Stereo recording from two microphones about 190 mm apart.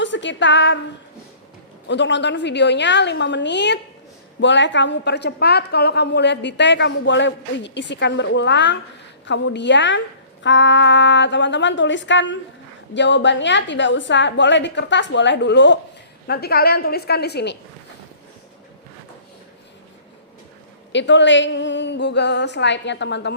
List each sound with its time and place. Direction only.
0.0 s a woman's voice: 75° left (ahead or behind)
1.9 s a woman's voice: 70° left (ahead or behind)
16.2 s a woman's voice: 55° left (ahead or behind)
20.9 s a woman's voice: 70° left (ahead or behind)